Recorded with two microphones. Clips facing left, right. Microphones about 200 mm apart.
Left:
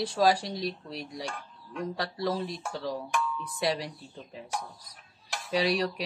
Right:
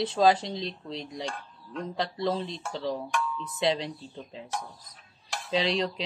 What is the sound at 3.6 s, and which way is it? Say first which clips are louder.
Speech: right 3 dB; 20° right (ahead or behind).